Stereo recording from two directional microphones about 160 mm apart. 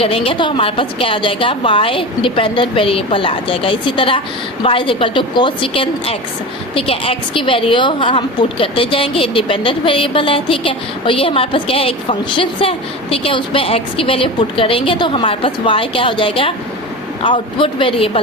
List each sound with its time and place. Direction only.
0.0 s a woman's voice: 35° left (ahead or behind)